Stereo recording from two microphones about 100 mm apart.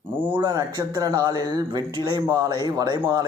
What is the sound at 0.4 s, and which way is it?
Speech, 40° right (ahead or behind).